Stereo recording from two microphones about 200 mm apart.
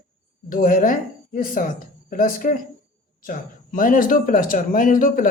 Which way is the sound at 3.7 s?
45° left (ahead or behind).